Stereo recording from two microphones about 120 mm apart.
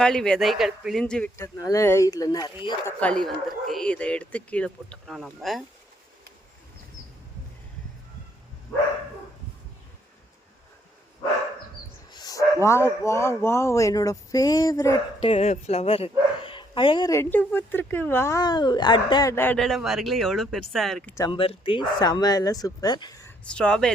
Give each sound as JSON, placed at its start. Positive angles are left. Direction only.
{"t": 0.0, "sound": "speech", "side_deg": 5}
{"t": 1.4, "sound": "speech", "side_deg": 25}
{"t": 3.0, "sound": "speech", "side_deg": 5}
{"t": 12.1, "sound": "speech", "side_deg": 30}
{"t": 15.2, "sound": "speech", "side_deg": 60}
{"t": 17.1, "sound": "speech", "side_deg": 20}
{"t": 19.3, "sound": "speech", "side_deg": 15}
{"t": 19.5, "sound": "speech", "side_deg": 0}
{"t": 21.3, "sound": "speech", "side_deg": 45}
{"t": 23.4, "sound": "speech", "side_deg": 10}